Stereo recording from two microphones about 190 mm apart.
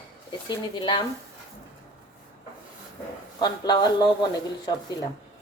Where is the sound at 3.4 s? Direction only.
20° left (ahead or behind).